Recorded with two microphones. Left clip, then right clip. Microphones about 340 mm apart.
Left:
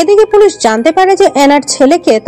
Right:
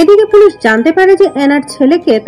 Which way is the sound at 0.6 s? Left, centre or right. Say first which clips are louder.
Even; centre.